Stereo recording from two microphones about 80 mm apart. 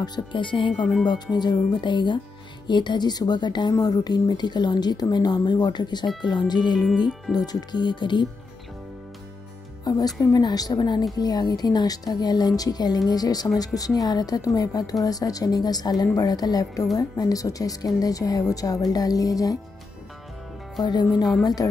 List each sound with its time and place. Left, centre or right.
0.0 s speech: left
1.0 s a woman's voice: left
9.9 s music: left
10.3 s a woman's voice: left
20.8 s a woman's voice: left